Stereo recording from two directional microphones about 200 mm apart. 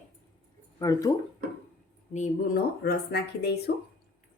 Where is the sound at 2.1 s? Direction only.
35° left (ahead or behind).